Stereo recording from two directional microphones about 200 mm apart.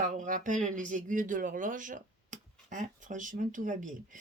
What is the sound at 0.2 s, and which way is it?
Speech, 40° right (ahead or behind).